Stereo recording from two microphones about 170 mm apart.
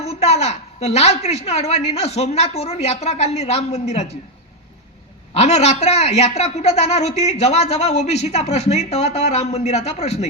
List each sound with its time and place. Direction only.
0.0 s a woman's voice: 40° left (ahead or behind)
5.3 s a woman's voice: 40° left (ahead or behind)